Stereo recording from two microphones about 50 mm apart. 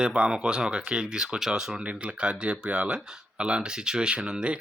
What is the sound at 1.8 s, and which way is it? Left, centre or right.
Speech, right.